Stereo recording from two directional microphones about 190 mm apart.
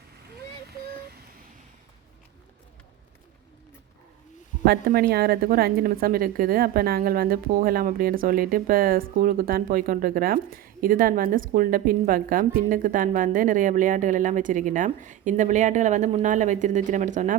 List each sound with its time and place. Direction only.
4.6 s a woman's voice: 55° right (ahead or behind)